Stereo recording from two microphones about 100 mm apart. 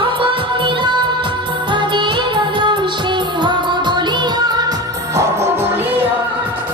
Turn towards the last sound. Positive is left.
turn(degrees=-25)  # may be behind; listen again after turning